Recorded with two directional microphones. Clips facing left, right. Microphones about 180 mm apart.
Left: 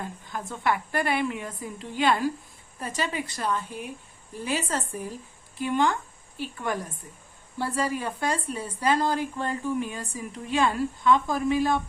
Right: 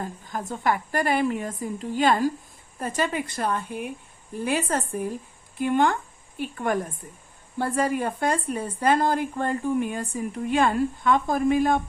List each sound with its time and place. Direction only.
0.0 s a woman's voice: 40° right (ahead or behind)